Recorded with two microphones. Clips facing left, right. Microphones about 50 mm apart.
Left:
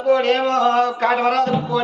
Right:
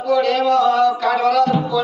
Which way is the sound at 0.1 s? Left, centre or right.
Left.